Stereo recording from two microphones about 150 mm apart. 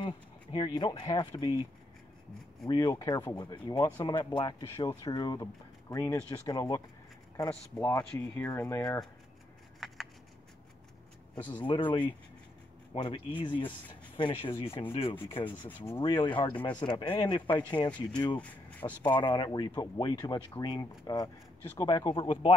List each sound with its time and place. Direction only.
0.0 s speech: 30° left (ahead or behind)
2.7 s speech: 25° left (ahead or behind)
7.4 s speech: 15° left (ahead or behind)
11.3 s speech: 10° left (ahead or behind)
11.6 s speech: 30° left (ahead or behind)
18.4 s speech: 10° left (ahead or behind)
19.0 s speech: 30° left (ahead or behind)